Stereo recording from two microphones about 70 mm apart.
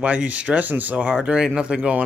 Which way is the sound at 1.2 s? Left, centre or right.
Centre.